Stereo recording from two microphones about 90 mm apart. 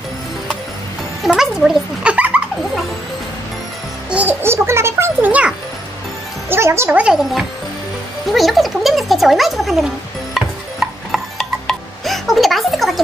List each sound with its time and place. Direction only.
1.2 s a sound: 5° right (ahead or behind)
2.1 s dog: 15° right (ahead or behind)
4.1 s a child's voice: 20° right (ahead or behind)
6.5 s a child's voice: 30° right (ahead or behind)
7.0 s speech: 5° right (ahead or behind)
10.3 s music: centre (ahead or behind)